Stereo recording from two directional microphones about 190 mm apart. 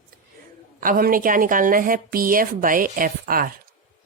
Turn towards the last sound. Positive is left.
turn(degrees=-50)  # may be behind; listen again after turning